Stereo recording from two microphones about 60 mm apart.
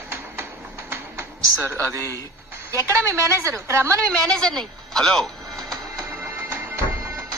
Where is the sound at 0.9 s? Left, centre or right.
Right.